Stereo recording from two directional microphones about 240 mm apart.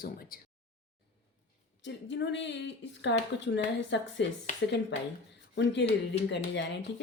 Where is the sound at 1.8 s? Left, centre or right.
Left.